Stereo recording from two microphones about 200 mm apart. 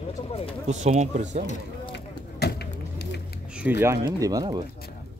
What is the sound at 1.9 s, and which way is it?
Vehicle, 55° left (ahead or behind).